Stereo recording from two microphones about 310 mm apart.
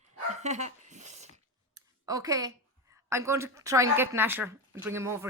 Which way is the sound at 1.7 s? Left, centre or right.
Centre.